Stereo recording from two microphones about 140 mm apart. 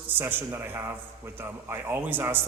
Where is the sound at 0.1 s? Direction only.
15° right (ahead or behind).